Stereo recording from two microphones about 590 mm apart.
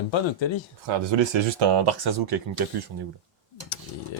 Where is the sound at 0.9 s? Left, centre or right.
Right.